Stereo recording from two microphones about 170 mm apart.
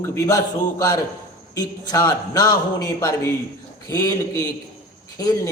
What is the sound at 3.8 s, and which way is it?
Speech, 20° left (ahead or behind).